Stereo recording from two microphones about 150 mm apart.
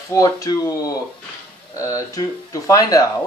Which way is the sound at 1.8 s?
20° left (ahead or behind).